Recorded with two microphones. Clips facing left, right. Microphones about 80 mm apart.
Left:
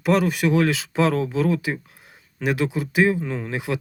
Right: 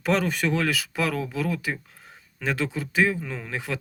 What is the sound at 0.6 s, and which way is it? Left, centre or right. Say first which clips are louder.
Speech: left 6 dB; left.